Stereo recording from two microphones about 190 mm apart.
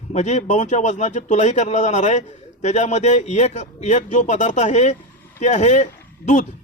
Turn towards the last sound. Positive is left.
turn(degrees=40)  # may be behind; listen again after turning